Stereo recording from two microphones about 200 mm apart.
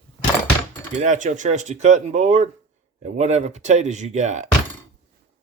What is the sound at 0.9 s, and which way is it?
Speech, 40° right (ahead or behind).